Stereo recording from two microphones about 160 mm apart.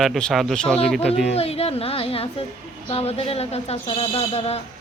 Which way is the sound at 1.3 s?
40° left (ahead or behind).